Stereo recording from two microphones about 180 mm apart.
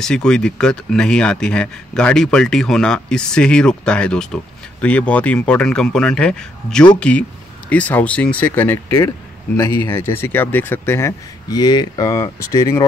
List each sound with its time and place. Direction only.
0.0 s speech: 5° left (ahead or behind)
9.6 s speech: 25° left (ahead or behind)
9.8 s speech: 15° left (ahead or behind)